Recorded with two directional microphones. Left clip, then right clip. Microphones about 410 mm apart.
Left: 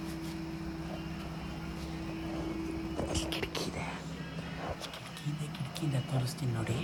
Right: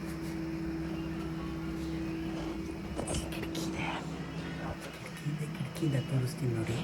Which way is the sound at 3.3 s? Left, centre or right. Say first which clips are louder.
Left 2 dB; left.